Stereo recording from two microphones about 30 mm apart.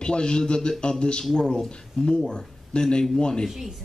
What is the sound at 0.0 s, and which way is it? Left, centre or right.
A man's voice, left.